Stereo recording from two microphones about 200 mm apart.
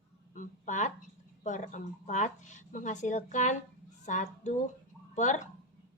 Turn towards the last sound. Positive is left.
turn(degrees=35)  # may be behind; listen again after turning